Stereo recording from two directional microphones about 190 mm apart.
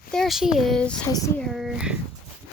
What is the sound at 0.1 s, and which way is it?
Speech, centre (ahead or behind).